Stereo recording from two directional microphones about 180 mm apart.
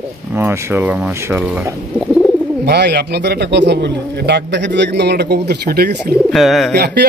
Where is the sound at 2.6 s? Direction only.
70° right (ahead or behind).